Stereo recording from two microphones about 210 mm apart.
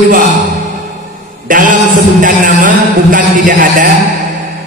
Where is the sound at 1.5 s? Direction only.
40° right (ahead or behind).